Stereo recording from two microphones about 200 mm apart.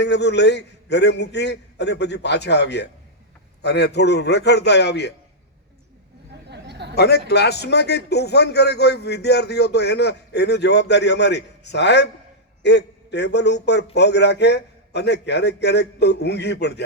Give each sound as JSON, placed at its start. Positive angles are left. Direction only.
{"t": 0.0, "sound": "a man's voice", "side_deg": 60}
{"t": 6.5, "sound": "a sound", "side_deg": -55}
{"t": 6.9, "sound": "a man's voice", "side_deg": 55}